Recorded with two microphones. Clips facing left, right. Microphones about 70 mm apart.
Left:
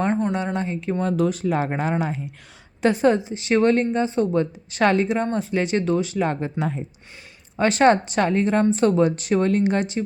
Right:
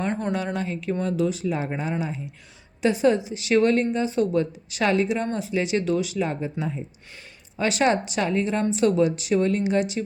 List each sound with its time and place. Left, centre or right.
0.1 s speech: left
1.0 s speech: left
2.8 s a woman's voice: left
3.2 s a woman's voice: left
6.2 s speech: left
7.5 s a woman's voice: left